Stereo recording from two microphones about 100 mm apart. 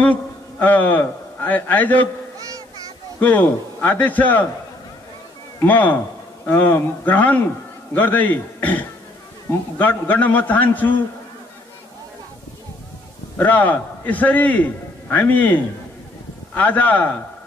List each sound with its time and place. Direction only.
0.0 s a man's voice: 15° left (ahead or behind)
3.2 s a man's voice: 15° left (ahead or behind)
5.6 s a man's voice: 15° left (ahead or behind)
13.4 s a man's voice: 15° left (ahead or behind)